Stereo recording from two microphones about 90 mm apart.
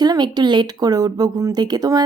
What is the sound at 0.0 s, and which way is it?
Speech, 50° right (ahead or behind).